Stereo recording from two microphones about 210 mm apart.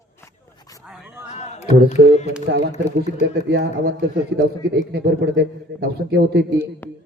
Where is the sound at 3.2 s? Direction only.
50° right (ahead or behind).